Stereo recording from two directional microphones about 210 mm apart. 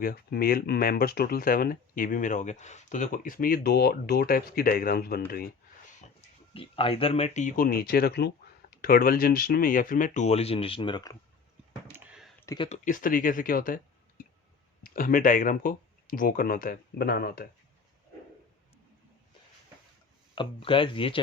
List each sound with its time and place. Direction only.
0.0 s speech: 45° left (ahead or behind)
6.5 s speech: 25° left (ahead or behind)
11.9 s a sound: 5° right (ahead or behind)
12.5 s speech: 30° left (ahead or behind)
14.9 s speech: 40° left (ahead or behind)
20.3 s speech: 25° left (ahead or behind)